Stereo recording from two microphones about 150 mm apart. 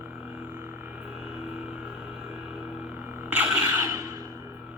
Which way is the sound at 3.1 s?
10° right (ahead or behind).